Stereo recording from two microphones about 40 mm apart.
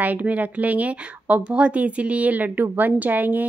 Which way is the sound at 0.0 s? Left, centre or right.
Right.